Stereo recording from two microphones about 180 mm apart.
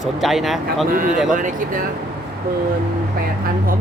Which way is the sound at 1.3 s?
50° right (ahead or behind).